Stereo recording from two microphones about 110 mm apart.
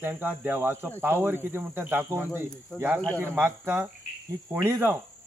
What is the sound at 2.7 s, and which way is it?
Speech, 15° left (ahead or behind).